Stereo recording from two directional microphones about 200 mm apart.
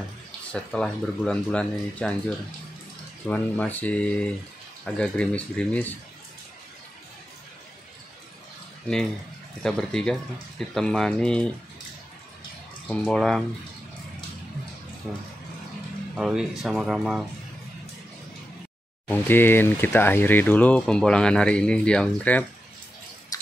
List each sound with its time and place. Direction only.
0.5 s speech: 5° left (ahead or behind)
8.9 s speech: 5° left (ahead or behind)
12.8 s speech: 5° left (ahead or behind)
16.2 s speech: 5° right (ahead or behind)
19.0 s speech: 10° left (ahead or behind)